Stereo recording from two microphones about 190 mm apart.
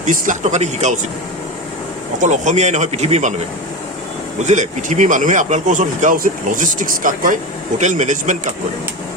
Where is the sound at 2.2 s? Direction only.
40° right (ahead or behind).